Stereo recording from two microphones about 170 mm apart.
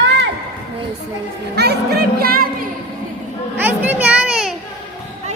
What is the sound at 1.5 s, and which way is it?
Music, 70° right (ahead or behind).